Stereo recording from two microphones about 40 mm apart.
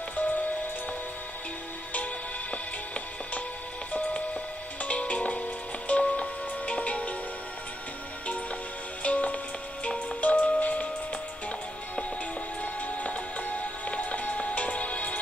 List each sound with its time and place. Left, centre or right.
0.1 s music: left
3.9 s music: left
9.0 s music: left